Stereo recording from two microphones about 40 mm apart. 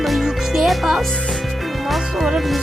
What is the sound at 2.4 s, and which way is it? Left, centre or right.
Speech, centre.